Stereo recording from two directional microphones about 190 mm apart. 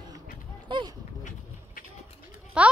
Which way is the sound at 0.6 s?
25° right (ahead or behind).